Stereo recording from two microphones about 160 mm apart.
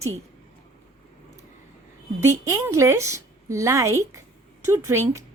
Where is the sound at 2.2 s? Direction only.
20° right (ahead or behind).